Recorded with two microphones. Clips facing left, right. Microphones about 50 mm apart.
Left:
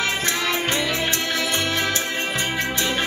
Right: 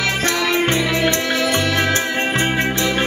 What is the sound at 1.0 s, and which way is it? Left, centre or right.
Music, right.